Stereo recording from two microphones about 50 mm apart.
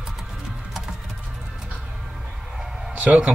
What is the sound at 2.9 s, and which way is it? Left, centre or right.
Speech, right.